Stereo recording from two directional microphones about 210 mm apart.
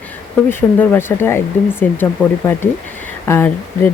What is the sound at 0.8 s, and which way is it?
Speech, 10° left (ahead or behind).